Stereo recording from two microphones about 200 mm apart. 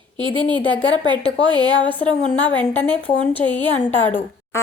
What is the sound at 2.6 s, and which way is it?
A woman's voice, 10° left (ahead or behind).